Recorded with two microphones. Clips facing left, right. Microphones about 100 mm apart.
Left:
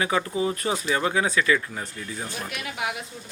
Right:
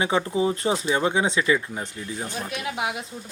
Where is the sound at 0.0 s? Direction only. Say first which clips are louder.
Right 2 dB; 25° right (ahead or behind).